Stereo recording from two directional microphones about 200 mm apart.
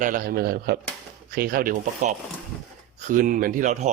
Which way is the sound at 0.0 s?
45° right (ahead or behind).